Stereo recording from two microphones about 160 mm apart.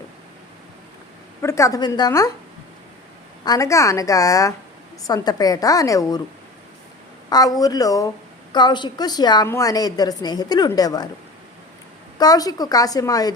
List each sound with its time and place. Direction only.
1.4 s a woman's voice: 15° left (ahead or behind)
3.4 s a woman's voice: 20° left (ahead or behind)
7.3 s a woman's voice: 25° left (ahead or behind)
12.2 s a woman's voice: 25° left (ahead or behind)